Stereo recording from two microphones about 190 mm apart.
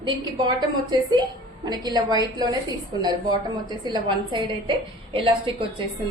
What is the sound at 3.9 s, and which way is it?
A woman's voice, 25° right (ahead or behind).